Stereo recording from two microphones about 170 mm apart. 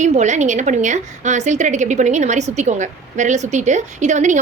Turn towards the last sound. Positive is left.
turn(degrees=-45)  # may be behind; listen again after turning